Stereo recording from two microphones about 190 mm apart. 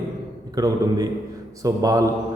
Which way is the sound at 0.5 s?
20° right (ahead or behind).